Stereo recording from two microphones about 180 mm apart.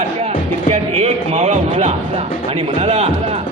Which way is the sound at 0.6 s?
40° right (ahead or behind).